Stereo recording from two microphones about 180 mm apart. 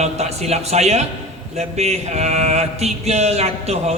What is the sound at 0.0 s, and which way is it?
A man's voice, 35° right (ahead or behind).